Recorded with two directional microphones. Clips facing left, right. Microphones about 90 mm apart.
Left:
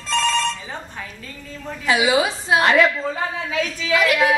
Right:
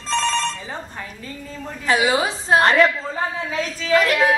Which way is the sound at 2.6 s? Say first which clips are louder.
Even; centre (ahead or behind).